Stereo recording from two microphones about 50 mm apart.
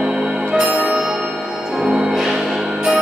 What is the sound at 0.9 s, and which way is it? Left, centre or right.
Music, centre.